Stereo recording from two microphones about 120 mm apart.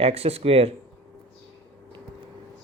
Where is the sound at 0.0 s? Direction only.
55° right (ahead or behind).